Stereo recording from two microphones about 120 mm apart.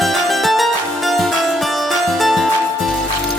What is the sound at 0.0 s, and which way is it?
Music, centre (ahead or behind).